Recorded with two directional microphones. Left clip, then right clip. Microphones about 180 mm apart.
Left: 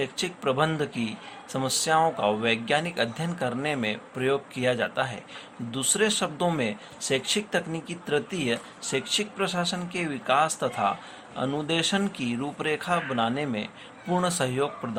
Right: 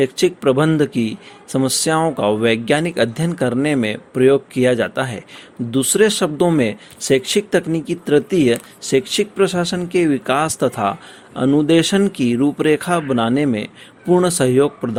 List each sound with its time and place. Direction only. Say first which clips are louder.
0.0 s speech: right 13 dB; 50° right (ahead or behind)